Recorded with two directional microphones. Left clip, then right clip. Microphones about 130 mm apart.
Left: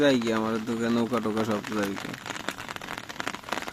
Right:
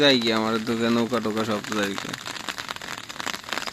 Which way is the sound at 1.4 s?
Centre (ahead or behind).